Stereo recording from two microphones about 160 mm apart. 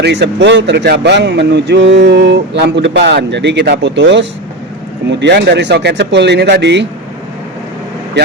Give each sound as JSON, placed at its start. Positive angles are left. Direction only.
{"t": 0.0, "sound": "speech", "side_deg": -90}